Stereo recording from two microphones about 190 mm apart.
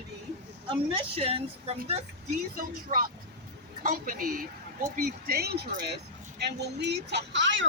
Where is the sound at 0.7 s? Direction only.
30° right (ahead or behind).